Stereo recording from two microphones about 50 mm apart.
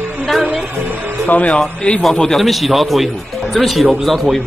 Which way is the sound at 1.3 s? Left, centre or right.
Left.